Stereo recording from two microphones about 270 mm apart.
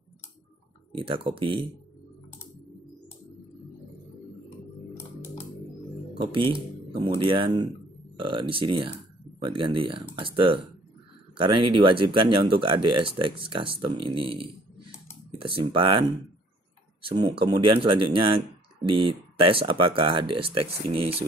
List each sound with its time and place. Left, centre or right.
0.9 s speech: centre
6.3 s speech: centre